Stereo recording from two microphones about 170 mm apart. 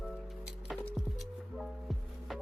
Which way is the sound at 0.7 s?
Centre (ahead or behind).